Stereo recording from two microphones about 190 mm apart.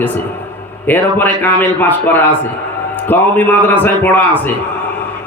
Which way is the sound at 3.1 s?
10° left (ahead or behind).